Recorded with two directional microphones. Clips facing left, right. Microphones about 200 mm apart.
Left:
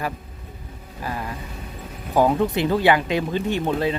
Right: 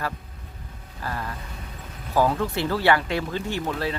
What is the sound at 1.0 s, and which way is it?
Speech, 15° left (ahead or behind).